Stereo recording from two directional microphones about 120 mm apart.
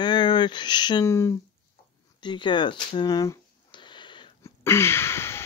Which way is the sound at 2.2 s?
40° left (ahead or behind).